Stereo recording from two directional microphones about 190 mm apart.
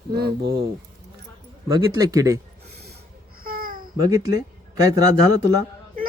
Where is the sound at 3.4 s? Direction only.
50° right (ahead or behind).